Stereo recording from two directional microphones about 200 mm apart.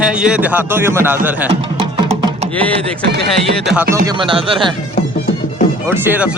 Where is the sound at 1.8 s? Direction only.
25° right (ahead or behind).